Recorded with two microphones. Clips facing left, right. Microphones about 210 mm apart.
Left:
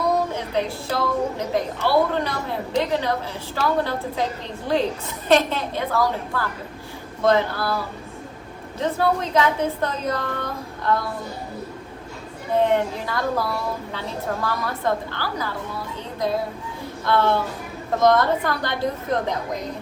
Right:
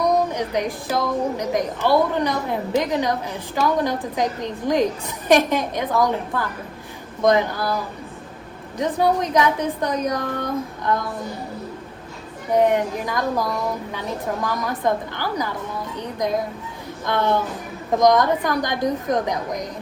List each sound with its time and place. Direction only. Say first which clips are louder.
0.0 s a woman's voice: right 3 dB; 15° right (ahead or behind)
8.8 s a woman's voice: right 2 dB; 15° right (ahead or behind)
12.5 s a woman's voice: right 2 dB; 15° right (ahead or behind)